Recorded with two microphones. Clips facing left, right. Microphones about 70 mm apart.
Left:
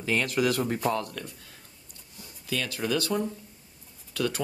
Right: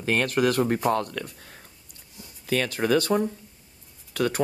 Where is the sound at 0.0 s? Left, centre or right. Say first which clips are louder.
Right 3 dB; right.